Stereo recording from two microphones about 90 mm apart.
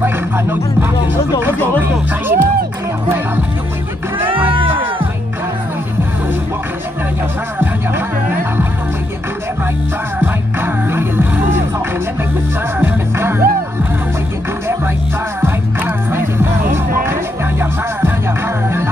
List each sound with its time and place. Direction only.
0.0 s music: 25° right (ahead or behind)
10.2 s music: 25° right (ahead or behind)
12.8 s music: 25° right (ahead or behind)
15.4 s music: 25° right (ahead or behind)